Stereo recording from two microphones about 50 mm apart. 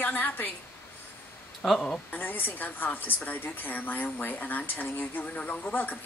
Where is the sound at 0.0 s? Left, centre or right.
Left.